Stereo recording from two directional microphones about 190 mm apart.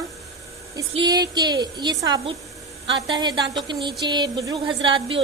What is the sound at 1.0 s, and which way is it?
A woman's voice, 20° right (ahead or behind).